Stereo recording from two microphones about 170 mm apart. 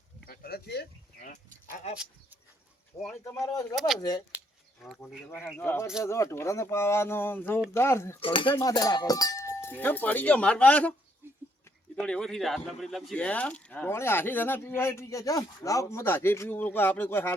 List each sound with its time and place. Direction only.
0.3 s speech: 65° left (ahead or behind)
1.2 s sheep: 50° left (ahead or behind)
2.9 s speech: 15° left (ahead or behind)
3.8 s speech: centre (ahead or behind); by 8.2 s 15° left (ahead or behind)
8.2 s speech: 30° left (ahead or behind); by 10.9 s 5° left (ahead or behind)
11.9 s speech: 5° left (ahead or behind)